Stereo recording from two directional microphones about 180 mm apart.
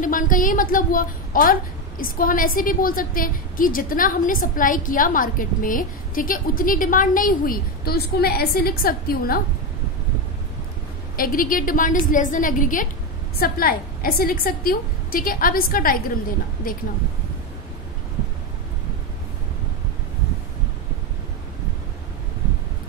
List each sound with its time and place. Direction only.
0.0 s a woman's voice: 50° left (ahead or behind)
11.1 s a woman's voice: 50° left (ahead or behind)